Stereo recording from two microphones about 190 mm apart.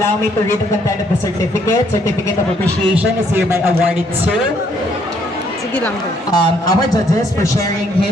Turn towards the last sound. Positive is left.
turn(degrees=15)  # may be behind; listen again after turning